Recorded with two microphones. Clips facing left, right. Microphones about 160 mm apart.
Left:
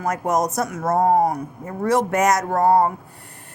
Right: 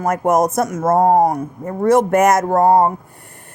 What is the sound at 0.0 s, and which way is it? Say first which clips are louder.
Speech: right 6 dB; 55° right (ahead or behind).